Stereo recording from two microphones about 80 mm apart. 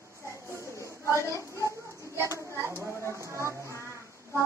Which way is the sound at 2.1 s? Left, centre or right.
Right.